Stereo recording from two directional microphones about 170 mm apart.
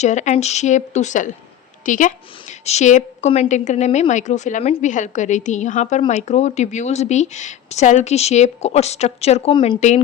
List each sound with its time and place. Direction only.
0.0 s a woman's voice: 45° left (ahead or behind); by 9.7 s 30° left (ahead or behind)